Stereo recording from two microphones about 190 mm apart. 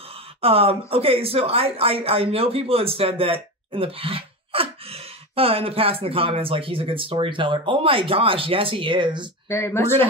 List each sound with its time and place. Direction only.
0.4 s speech: 30° right (ahead or behind)
9.5 s speech: 15° left (ahead or behind)